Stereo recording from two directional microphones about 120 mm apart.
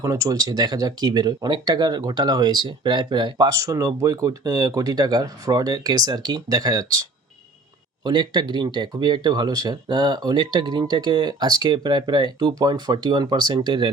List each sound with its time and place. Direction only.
0.0 s speech: 25° right (ahead or behind)